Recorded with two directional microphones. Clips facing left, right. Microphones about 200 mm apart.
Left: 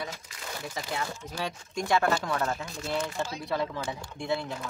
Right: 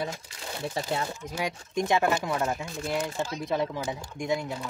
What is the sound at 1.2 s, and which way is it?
Speech, 15° right (ahead or behind).